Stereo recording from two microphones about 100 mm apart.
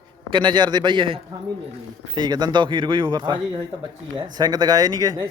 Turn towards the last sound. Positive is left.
turn(degrees=-40)  # may be behind; listen again after turning